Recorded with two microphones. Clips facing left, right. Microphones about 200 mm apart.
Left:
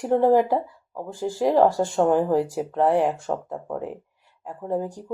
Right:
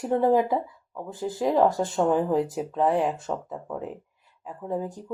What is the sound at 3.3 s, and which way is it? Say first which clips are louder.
Speech: left 3 dB; 40° left (ahead or behind).